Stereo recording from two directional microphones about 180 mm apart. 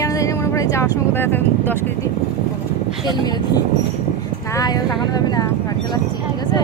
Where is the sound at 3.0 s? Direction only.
20° left (ahead or behind).